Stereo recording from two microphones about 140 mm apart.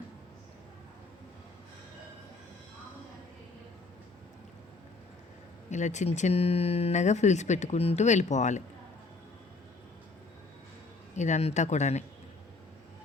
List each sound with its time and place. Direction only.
5.7 s speech: 60° left (ahead or behind)
11.2 s speech: 55° left (ahead or behind)